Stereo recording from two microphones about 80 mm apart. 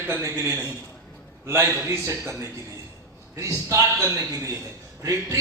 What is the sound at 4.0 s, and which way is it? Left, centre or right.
A man's voice, right.